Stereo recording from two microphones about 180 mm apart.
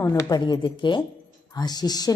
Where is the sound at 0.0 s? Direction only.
15° left (ahead or behind).